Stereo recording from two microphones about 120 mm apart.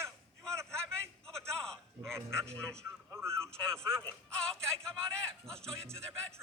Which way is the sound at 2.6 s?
5° left (ahead or behind).